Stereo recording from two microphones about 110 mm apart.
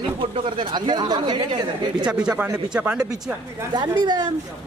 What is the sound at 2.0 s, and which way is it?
Speech, 10° right (ahead or behind).